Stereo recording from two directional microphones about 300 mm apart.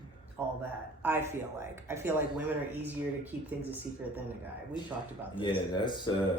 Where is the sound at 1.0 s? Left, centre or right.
Centre.